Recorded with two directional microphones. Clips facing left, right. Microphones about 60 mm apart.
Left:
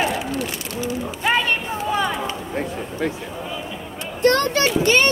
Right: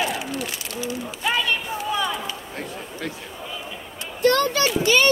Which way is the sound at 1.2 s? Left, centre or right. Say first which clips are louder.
Left 3 dB; left.